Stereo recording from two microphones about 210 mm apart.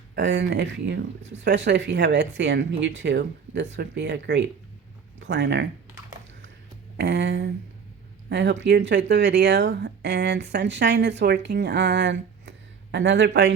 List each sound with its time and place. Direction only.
0.2 s speech: 55° right (ahead or behind)
6.9 s speech: 55° right (ahead or behind)